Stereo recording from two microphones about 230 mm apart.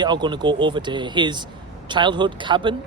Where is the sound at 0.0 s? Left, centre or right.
Centre.